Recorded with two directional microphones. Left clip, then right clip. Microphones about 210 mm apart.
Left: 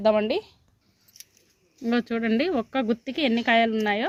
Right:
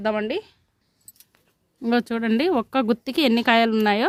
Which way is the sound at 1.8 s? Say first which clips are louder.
Right 3 dB; 50° right (ahead or behind).